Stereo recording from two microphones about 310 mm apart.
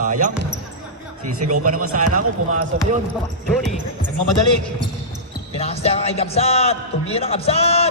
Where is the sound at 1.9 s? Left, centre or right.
Right.